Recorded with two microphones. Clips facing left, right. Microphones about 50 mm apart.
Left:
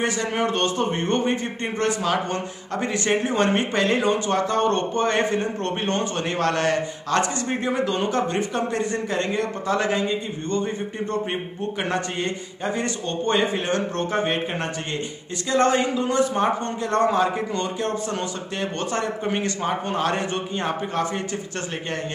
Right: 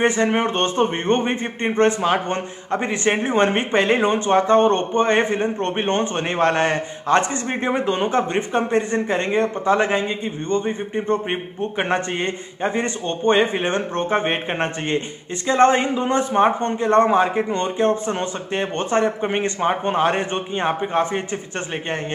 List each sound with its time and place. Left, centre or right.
0.0 s a man's voice: right